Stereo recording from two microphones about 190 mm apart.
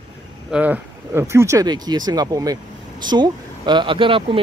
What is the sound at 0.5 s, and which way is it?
Speech, 5° right (ahead or behind).